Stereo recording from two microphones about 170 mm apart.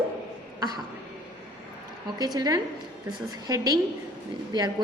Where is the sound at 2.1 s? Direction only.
20° right (ahead or behind).